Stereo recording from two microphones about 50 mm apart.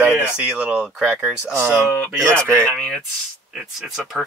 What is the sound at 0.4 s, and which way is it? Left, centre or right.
Speech, right.